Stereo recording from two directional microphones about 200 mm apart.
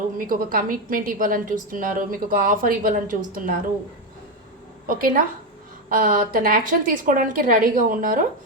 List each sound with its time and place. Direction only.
0.2 s a woman's voice: 45° right (ahead or behind)
4.9 s a woman's voice: 45° right (ahead or behind)